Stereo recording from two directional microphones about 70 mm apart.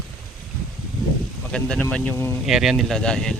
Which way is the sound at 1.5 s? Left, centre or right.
Centre.